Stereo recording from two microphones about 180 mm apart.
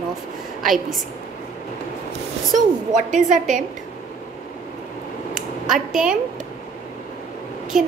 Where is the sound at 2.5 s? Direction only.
45° right (ahead or behind).